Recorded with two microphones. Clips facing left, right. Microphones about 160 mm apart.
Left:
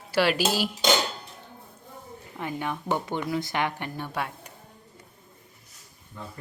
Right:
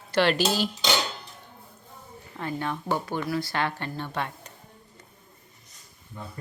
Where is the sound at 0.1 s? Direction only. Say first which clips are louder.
Right 1 dB; 5° left (ahead or behind).